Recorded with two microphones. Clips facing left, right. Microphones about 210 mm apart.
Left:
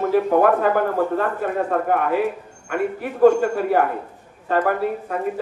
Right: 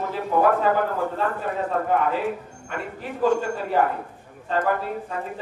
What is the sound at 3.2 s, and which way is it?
Speech, 60° left (ahead or behind).